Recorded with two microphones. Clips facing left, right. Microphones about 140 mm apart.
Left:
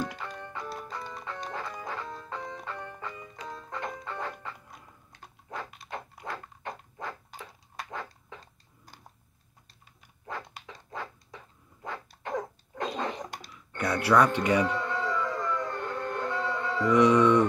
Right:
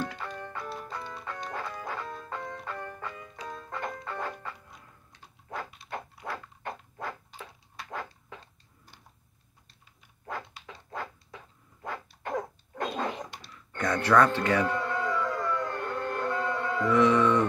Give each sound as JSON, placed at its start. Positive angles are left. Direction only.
{"t": 0.2, "sound": "music", "side_deg": -5}
{"t": 5.9, "sound": "dog", "side_deg": -5}
{"t": 10.9, "sound": "dog", "side_deg": -5}
{"t": 13.5, "sound": "speech", "side_deg": 10}
{"t": 14.7, "sound": "a sound", "side_deg": -5}
{"t": 16.9, "sound": "a sound", "side_deg": 15}